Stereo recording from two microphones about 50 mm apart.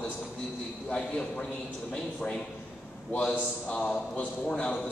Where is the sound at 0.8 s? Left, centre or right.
Centre.